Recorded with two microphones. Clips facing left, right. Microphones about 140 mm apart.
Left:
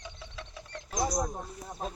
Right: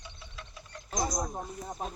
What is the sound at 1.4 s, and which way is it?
Speech, 15° right (ahead or behind).